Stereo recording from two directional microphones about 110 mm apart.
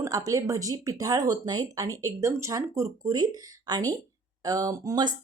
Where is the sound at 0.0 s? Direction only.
30° right (ahead or behind).